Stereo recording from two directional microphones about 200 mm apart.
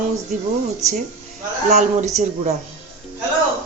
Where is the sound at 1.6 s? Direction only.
35° right (ahead or behind).